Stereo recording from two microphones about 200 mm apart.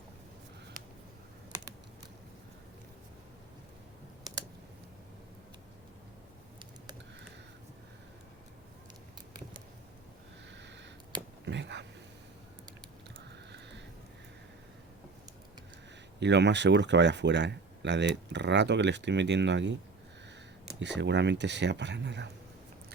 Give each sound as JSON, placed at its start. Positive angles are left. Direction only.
{"t": 11.4, "sound": "a sound", "side_deg": -60}
{"t": 16.2, "sound": "speech", "side_deg": -60}
{"t": 20.7, "sound": "speech", "side_deg": -60}